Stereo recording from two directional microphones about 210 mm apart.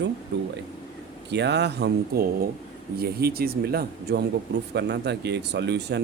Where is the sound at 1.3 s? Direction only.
55° right (ahead or behind).